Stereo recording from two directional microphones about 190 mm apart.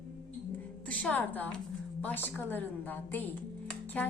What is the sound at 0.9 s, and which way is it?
A woman's voice, 10° left (ahead or behind).